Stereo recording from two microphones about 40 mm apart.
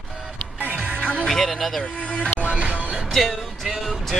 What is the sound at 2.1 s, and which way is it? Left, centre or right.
Music, left.